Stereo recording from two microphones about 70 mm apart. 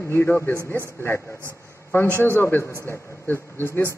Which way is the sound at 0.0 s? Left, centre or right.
Left.